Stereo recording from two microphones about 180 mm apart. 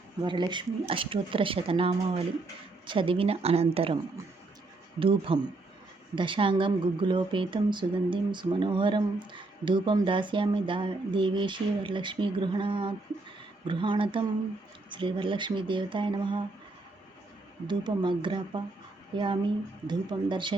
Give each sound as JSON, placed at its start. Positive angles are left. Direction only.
{"t": 0.3, "sound": "a woman's voice", "side_deg": -25}
{"t": 4.9, "sound": "a woman's voice", "side_deg": -30}
{"t": 17.7, "sound": "a woman's voice", "side_deg": -25}